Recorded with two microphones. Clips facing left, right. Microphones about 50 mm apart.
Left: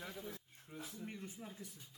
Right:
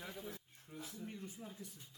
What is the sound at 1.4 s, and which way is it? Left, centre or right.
Speech, centre.